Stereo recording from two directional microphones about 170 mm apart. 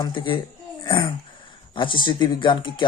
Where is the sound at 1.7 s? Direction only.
30° left (ahead or behind).